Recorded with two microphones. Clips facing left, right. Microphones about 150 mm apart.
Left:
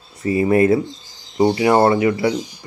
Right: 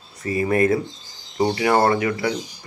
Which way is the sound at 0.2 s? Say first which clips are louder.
Left 4 dB; 25° left (ahead or behind).